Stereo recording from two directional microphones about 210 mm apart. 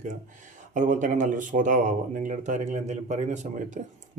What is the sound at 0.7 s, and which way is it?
Speech, 35° right (ahead or behind).